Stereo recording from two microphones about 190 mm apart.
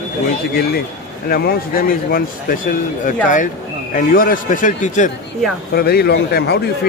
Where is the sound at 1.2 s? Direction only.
50° left (ahead or behind).